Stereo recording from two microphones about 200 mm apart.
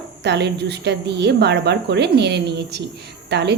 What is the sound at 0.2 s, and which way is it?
Speech, 60° right (ahead or behind).